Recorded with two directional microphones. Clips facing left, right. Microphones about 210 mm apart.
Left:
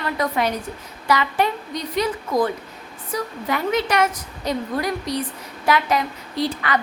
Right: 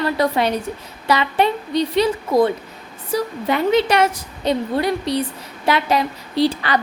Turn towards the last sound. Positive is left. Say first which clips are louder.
# right 5 dB
turn(degrees=-30)  # may be behind; listen again after turning